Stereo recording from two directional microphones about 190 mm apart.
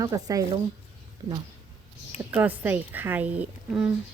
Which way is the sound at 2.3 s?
10° right (ahead or behind).